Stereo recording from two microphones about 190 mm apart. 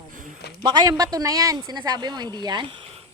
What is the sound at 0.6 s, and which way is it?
Speech, 20° right (ahead or behind).